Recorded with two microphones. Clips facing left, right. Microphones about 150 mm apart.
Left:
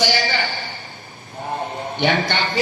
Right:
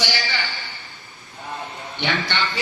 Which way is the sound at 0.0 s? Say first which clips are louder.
Left 6 dB; 45° left (ahead or behind).